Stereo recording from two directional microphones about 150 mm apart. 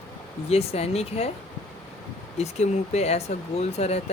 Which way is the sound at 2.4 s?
50° left (ahead or behind).